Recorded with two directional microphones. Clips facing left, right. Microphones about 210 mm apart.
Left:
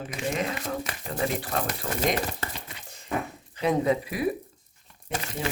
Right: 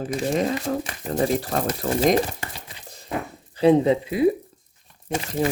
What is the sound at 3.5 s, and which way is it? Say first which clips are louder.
Speech: right 7 dB; 30° right (ahead or behind).